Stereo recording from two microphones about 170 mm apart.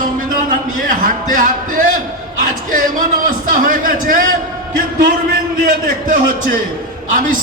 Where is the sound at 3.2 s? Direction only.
55° right (ahead or behind).